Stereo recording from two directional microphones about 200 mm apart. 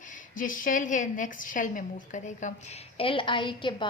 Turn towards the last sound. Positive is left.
turn(degrees=25)  # may be behind; listen again after turning